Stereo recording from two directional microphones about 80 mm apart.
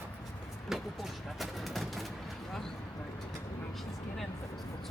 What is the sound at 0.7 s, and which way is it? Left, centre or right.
Speech, centre.